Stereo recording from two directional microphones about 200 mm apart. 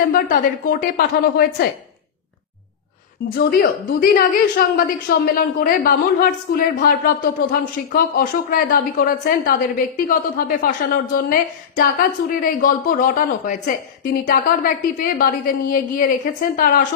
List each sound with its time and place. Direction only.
0.1 s a woman's voice: 45° left (ahead or behind)
3.3 s a woman's voice: 50° left (ahead or behind)